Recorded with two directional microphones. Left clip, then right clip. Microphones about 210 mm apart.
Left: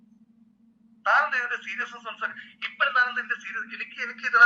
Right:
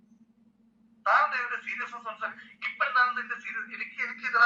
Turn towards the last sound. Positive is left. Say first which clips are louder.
# left 5 dB
turn(degrees=35)  # may be behind; listen again after turning